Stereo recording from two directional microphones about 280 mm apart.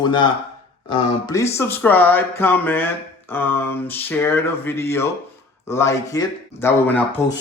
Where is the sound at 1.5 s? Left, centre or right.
Centre.